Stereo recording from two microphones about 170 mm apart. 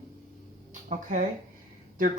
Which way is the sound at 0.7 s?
45° right (ahead or behind).